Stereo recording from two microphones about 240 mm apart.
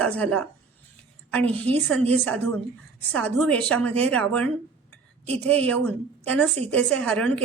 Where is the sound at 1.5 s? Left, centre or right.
Centre.